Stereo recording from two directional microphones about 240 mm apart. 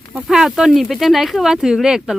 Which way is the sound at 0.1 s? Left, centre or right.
Centre.